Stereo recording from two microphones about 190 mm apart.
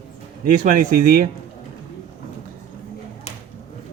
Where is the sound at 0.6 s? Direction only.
45° right (ahead or behind).